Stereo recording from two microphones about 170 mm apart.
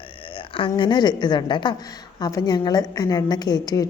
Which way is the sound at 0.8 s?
25° left (ahead or behind).